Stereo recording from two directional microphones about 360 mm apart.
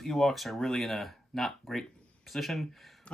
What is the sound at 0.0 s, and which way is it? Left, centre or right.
Speech, centre.